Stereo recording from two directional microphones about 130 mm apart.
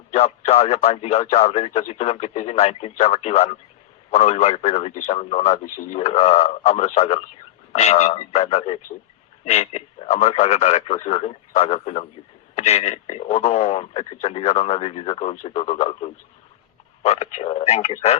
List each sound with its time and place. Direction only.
0.1 s a man's voice: 55° left (ahead or behind)